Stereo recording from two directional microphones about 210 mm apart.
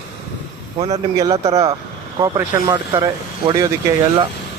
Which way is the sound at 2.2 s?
20° right (ahead or behind).